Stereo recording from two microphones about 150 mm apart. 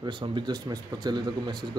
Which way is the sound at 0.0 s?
30° right (ahead or behind).